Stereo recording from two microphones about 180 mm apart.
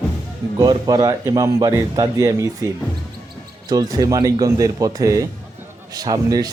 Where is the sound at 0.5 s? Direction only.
20° right (ahead or behind).